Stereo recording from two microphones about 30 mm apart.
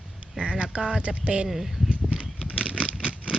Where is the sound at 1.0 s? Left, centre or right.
Right.